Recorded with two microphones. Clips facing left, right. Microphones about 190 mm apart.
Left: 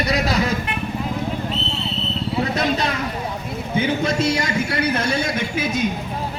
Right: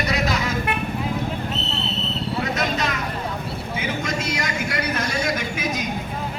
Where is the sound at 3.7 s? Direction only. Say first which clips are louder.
Left 7 dB; 30° left (ahead or behind).